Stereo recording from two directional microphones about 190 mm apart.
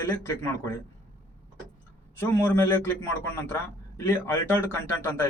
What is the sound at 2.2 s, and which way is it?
Speech, 10° left (ahead or behind).